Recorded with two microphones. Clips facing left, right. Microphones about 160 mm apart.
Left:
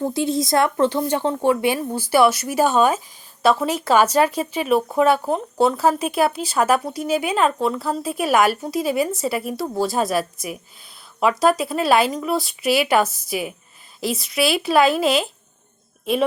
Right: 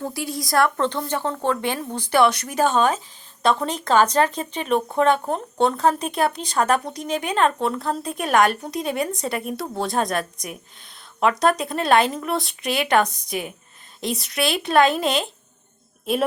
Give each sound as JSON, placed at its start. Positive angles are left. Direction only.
{"t": 0.0, "sound": "speech", "side_deg": 20}
{"t": 0.8, "sound": "speech", "side_deg": 10}